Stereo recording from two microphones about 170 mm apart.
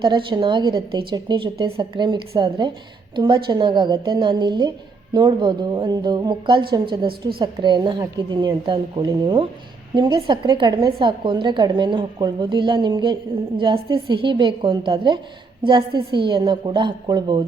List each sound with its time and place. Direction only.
0.0 s a woman's voice: 30° right (ahead or behind)